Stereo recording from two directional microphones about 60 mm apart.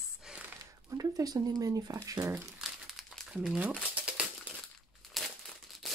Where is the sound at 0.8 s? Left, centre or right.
Right.